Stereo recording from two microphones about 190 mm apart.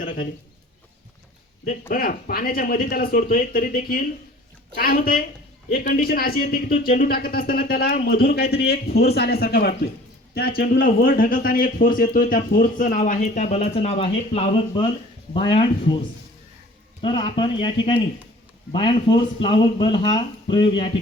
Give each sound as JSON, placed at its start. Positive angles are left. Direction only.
{"t": 1.9, "sound": "a man's voice", "side_deg": 50}
{"t": 17.0, "sound": "speech", "side_deg": 25}